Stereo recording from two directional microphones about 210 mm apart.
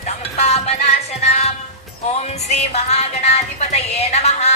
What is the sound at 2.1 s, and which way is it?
Music, 30° left (ahead or behind).